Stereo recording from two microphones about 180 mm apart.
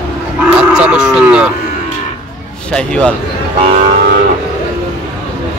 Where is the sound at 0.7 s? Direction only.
5° right (ahead or behind).